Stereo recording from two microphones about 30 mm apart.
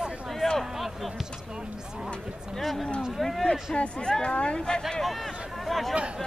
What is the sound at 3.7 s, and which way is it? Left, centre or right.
Speech, left.